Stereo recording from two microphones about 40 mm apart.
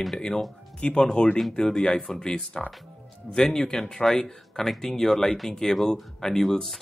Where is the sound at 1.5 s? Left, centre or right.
Centre.